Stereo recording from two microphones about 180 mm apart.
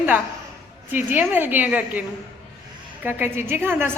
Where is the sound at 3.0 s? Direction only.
10° right (ahead or behind).